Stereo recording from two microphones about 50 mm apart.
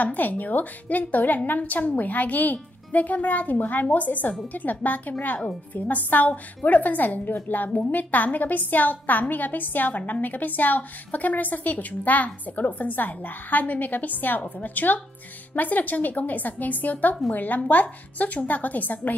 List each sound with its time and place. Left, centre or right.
0.0 s a woman's voice: left